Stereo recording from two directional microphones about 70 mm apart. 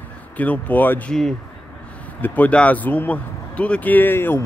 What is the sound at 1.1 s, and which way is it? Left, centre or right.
Speech, centre.